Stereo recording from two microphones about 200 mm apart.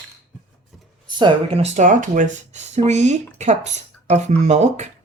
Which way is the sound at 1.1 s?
25° right (ahead or behind).